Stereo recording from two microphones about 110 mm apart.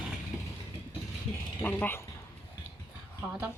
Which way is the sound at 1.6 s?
20° left (ahead or behind).